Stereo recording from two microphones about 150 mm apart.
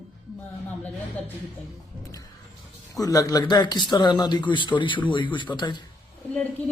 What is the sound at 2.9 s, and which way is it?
A man's voice, 25° left (ahead or behind).